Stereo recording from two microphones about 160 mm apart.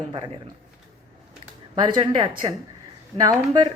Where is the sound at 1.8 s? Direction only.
30° right (ahead or behind).